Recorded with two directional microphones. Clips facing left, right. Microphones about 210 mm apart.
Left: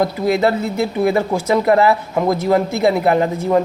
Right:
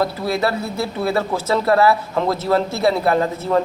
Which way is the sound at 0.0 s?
20° left (ahead or behind).